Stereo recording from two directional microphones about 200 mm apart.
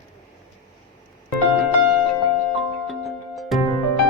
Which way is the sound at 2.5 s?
Centre (ahead or behind).